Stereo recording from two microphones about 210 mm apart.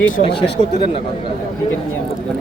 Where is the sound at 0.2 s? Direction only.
25° left (ahead or behind).